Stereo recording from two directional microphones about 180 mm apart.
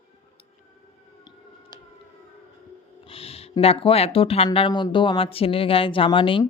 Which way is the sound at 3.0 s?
30° left (ahead or behind).